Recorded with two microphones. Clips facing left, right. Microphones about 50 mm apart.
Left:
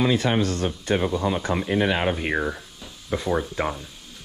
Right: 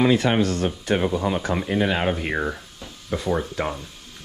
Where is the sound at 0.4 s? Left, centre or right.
Right.